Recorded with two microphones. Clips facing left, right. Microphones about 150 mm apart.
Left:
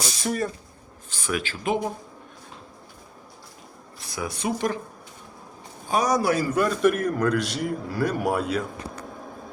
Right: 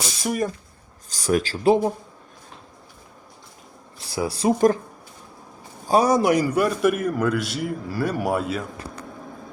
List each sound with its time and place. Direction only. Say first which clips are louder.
0.2 s speech: right 3 dB; 10° right (ahead or behind)
1.1 s speech: right 7 dB; 40° right (ahead or behind)
4.0 s speech: right 7 dB; 30° right (ahead or behind)
5.9 s a man's voice: right 4 dB; 30° right (ahead or behind); by 8.6 s centre (ahead or behind)